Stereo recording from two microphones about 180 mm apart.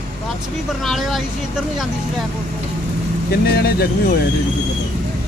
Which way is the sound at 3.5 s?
60° left (ahead or behind).